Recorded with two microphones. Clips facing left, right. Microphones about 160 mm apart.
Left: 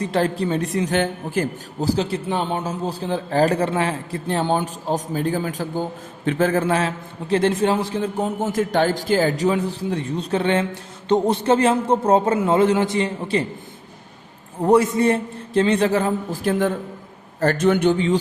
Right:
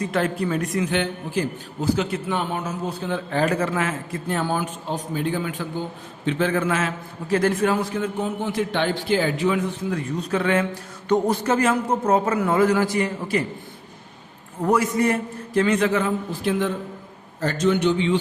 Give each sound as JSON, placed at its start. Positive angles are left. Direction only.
{"t": 0.0, "sound": "a man's voice", "side_deg": 30}
{"t": 1.8, "sound": "a man's voice", "side_deg": 35}
{"t": 14.6, "sound": "a man's voice", "side_deg": 30}